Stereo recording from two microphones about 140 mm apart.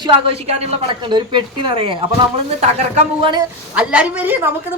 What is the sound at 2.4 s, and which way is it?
Speech, 50° right (ahead or behind).